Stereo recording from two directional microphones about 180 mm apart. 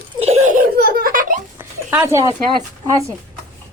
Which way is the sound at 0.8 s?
55° right (ahead or behind).